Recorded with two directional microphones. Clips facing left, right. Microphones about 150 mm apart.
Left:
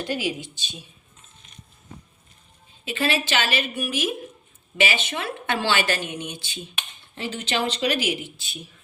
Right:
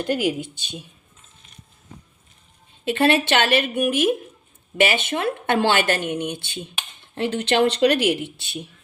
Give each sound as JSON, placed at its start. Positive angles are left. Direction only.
{"t": 0.0, "sound": "speech", "side_deg": -55}
{"t": 2.8, "sound": "a woman's voice", "side_deg": -55}